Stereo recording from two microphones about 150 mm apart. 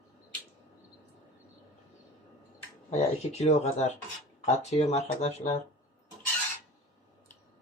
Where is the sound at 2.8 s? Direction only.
45° left (ahead or behind).